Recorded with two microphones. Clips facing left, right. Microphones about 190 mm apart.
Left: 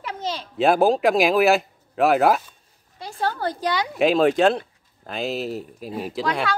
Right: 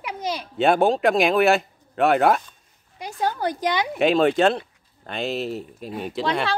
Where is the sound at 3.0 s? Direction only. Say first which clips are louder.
Right 1 dB; 15° right (ahead or behind).